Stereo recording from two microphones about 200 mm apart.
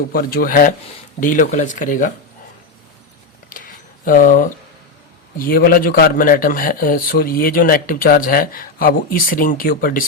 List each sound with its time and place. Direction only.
0.1 s a man's voice: 45° left (ahead or behind)
3.5 s a sound: 45° left (ahead or behind)
5.4 s a man's voice: 45° left (ahead or behind)